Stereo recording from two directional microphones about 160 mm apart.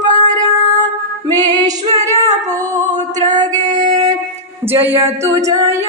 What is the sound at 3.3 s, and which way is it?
Music, 25° right (ahead or behind).